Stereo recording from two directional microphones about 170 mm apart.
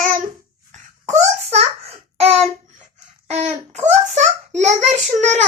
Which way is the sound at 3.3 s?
40° right (ahead or behind).